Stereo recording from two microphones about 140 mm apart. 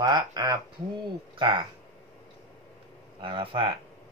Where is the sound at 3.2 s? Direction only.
40° right (ahead or behind).